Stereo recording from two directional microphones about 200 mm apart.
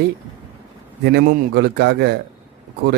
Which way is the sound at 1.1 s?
50° right (ahead or behind).